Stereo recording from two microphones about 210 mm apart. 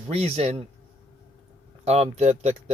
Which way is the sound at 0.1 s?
30° right (ahead or behind).